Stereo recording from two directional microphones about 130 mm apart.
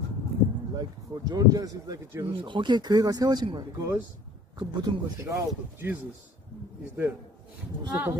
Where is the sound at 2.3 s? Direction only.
40° right (ahead or behind).